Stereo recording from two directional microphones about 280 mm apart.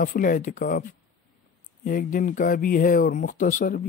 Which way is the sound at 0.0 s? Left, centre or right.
Left.